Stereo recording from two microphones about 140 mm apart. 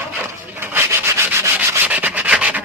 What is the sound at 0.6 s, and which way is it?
Rub, 15° right (ahead or behind).